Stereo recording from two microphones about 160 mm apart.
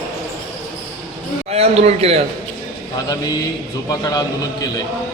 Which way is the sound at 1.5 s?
40° right (ahead or behind).